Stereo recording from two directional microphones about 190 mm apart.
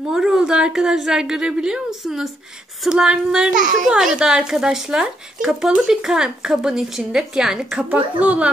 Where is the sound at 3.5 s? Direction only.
40° right (ahead or behind).